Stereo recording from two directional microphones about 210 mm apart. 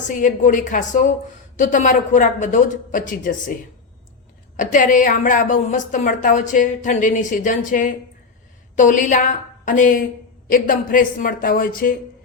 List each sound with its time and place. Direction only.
0.1 s a woman's voice: 35° left (ahead or behind)